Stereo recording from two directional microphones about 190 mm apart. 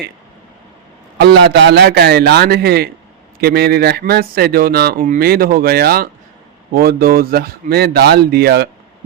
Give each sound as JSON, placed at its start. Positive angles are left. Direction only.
{"t": 1.2, "sound": "speech", "side_deg": -60}